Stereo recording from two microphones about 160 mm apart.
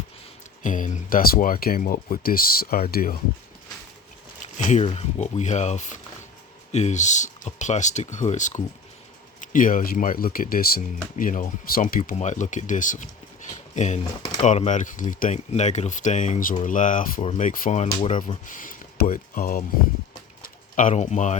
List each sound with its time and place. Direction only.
0.6 s speech: 55° left (ahead or behind)
4.4 s speech: 45° left (ahead or behind)
20.7 s speech: 50° left (ahead or behind)